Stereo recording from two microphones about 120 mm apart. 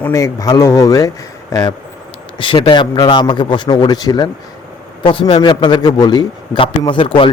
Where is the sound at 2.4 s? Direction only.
45° left (ahead or behind).